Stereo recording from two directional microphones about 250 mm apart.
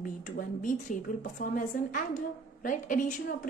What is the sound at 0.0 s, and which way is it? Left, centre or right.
A woman's voice, left.